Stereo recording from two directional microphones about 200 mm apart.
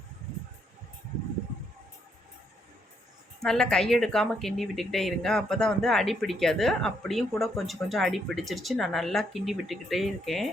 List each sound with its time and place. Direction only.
3.4 s speech: centre (ahead or behind)